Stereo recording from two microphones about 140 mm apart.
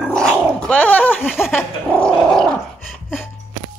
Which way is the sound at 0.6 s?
10° left (ahead or behind).